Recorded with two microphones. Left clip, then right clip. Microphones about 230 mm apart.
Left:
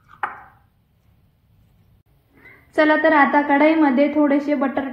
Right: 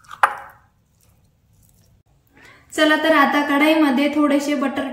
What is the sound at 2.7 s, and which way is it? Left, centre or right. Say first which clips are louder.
A woman's voice: left 1 dB; left.